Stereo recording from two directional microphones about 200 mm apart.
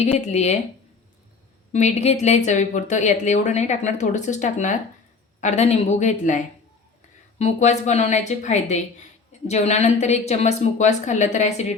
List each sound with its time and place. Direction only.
0.0 s speech: 35° left (ahead or behind)
1.7 s speech: 35° left (ahead or behind)